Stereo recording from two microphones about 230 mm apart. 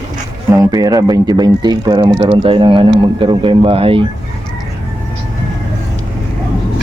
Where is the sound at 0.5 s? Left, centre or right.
Centre.